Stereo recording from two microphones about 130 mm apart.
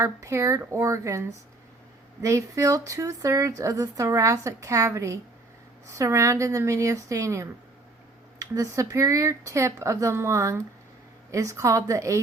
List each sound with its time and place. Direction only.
0.0 s speech: 25° right (ahead or behind)